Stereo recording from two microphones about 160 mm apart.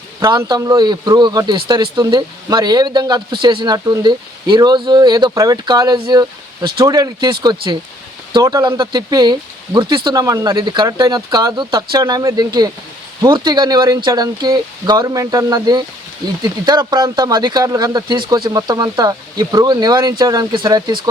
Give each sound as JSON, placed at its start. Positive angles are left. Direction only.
{"t": 0.2, "sound": "speech", "side_deg": -25}